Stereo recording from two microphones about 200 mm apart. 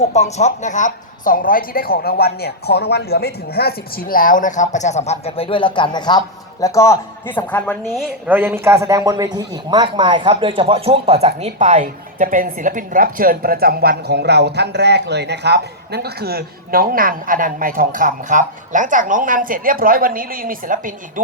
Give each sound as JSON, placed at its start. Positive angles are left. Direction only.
{"t": 0.0, "sound": "speech", "side_deg": 35}